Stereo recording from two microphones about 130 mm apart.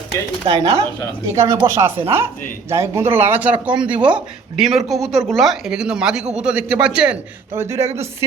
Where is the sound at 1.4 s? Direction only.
25° right (ahead or behind).